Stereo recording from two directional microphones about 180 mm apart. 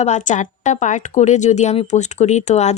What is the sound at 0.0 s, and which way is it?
A woman's voice, 40° left (ahead or behind).